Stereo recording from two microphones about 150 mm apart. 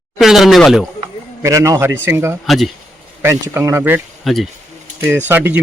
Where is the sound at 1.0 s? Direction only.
20° right (ahead or behind).